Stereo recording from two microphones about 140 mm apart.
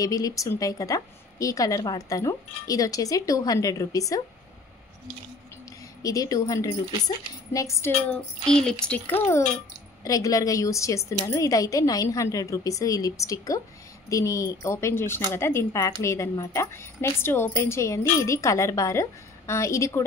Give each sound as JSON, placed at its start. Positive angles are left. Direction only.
{"t": 0.0, "sound": "speech", "side_deg": 25}
{"t": 6.0, "sound": "speech", "side_deg": 25}
{"t": 8.5, "sound": "speech", "side_deg": 5}